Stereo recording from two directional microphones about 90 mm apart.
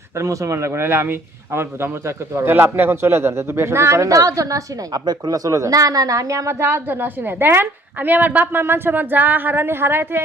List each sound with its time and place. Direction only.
0.2 s a man's voice: 35° right (ahead or behind)